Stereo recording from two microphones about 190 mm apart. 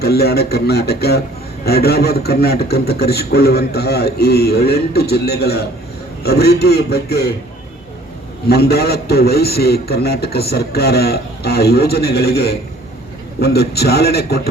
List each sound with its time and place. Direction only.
0.0 s a man's voice: 55° left (ahead or behind)
8.4 s a man's voice: 60° left (ahead or behind)